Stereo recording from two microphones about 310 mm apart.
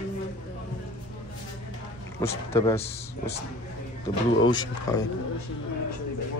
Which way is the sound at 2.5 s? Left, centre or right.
Centre.